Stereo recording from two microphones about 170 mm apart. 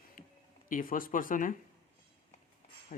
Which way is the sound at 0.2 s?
55° left (ahead or behind).